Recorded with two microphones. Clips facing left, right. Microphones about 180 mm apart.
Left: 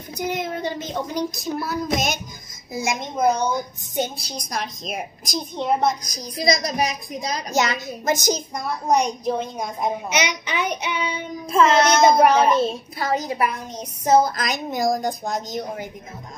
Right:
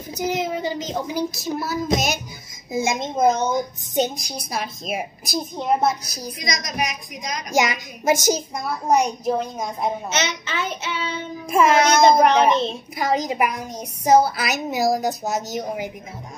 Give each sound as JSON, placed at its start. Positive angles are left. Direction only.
{"t": 0.1, "sound": "speech", "side_deg": -5}
{"t": 2.7, "sound": "a woman's voice", "side_deg": -20}
{"t": 6.3, "sound": "a woman's voice", "side_deg": 35}
{"t": 7.5, "sound": "a woman's voice", "side_deg": -10}
{"t": 10.1, "sound": "child singing", "side_deg": 15}
{"t": 11.5, "sound": "a woman's voice", "side_deg": -10}
{"t": 12.0, "sound": "child singing", "side_deg": 10}
{"t": 12.9, "sound": "a woman's voice", "side_deg": -15}